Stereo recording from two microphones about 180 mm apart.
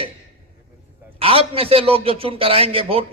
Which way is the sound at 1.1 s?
30° right (ahead or behind).